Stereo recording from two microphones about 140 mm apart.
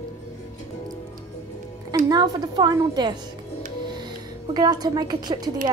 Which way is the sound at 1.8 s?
25° right (ahead or behind).